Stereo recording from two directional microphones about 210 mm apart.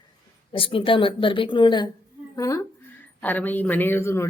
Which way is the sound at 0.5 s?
25° left (ahead or behind).